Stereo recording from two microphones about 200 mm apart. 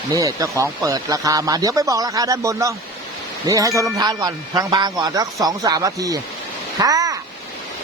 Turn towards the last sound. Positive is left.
turn(degrees=-20)  # may be behind; listen again after turning